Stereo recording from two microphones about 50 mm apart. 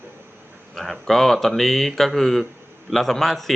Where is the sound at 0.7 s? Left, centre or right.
Centre.